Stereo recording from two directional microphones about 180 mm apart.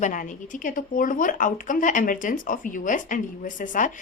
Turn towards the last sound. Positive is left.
turn(degrees=45)  # may be behind; listen again after turning